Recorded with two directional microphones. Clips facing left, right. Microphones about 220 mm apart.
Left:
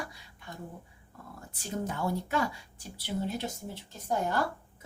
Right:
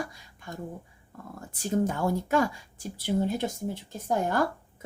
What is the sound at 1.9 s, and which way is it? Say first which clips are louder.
A woman's voice: right 5 dB; 45° right (ahead or behind).